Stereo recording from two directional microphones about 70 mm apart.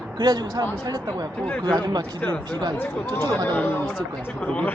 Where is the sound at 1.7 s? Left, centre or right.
Right.